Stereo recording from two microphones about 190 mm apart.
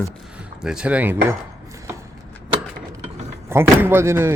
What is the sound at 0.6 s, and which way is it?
Speech, 5° right (ahead or behind).